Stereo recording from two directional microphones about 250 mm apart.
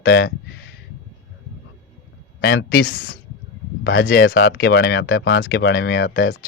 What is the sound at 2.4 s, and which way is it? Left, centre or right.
Speech, left.